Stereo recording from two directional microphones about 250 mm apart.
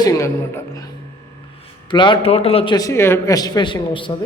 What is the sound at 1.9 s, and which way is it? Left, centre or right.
A man's voice, centre.